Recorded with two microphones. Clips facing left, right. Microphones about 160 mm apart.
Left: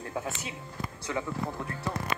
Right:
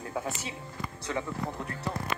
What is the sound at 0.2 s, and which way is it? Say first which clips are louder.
Speech: right 1 dB; 35° right (ahead or behind).